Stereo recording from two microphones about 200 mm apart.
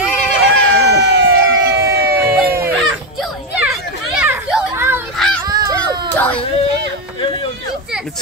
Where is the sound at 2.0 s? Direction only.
50° right (ahead or behind).